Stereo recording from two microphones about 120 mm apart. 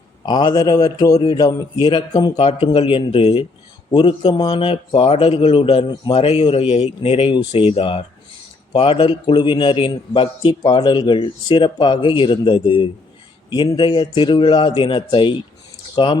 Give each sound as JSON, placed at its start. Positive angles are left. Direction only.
{"t": 0.3, "sound": "a man's voice", "side_deg": 35}
{"t": 2.3, "sound": "a man's voice", "side_deg": 55}